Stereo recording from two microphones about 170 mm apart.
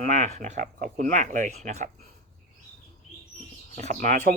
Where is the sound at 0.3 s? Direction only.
40° right (ahead or behind).